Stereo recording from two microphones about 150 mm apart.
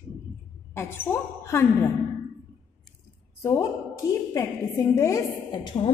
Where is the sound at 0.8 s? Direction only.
15° left (ahead or behind).